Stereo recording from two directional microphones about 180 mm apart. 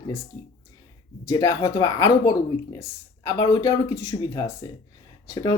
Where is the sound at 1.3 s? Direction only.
20° left (ahead or behind).